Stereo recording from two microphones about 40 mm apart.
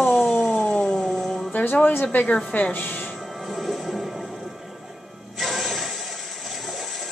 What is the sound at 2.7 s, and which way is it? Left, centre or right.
Music, left.